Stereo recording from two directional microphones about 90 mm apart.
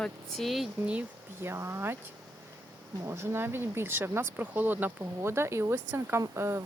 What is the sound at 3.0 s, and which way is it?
Speech, 30° right (ahead or behind).